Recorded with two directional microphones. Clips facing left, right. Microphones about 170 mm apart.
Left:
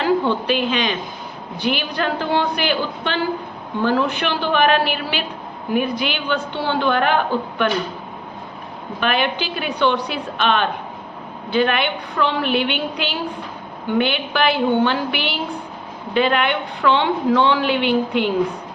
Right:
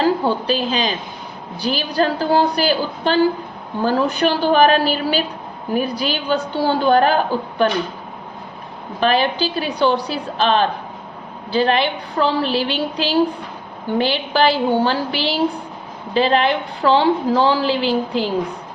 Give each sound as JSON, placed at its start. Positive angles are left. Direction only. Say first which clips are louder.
{"t": 0.0, "sound": "a woman's voice", "louder": "right 1 dB", "side_deg": -35}
{"t": 9.0, "sound": "a woman's voice", "louder": "right 4 dB", "side_deg": -35}